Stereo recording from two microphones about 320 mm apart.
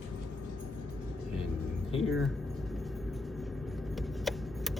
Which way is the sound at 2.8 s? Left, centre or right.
Centre.